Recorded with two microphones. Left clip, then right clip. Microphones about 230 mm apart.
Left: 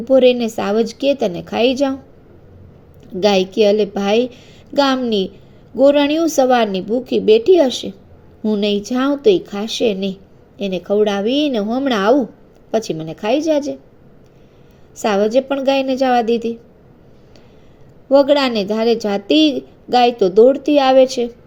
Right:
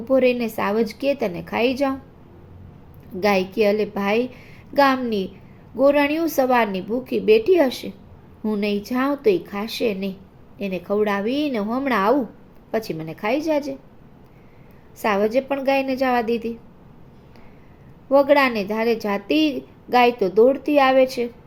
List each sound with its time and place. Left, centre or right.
0.4 s a woman's voice: centre
3.2 s a woman's voice: centre
15.0 s a woman's voice: centre
18.1 s a woman's voice: centre